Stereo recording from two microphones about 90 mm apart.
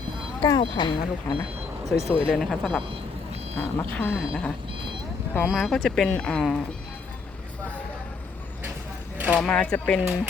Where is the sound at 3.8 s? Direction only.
15° left (ahead or behind).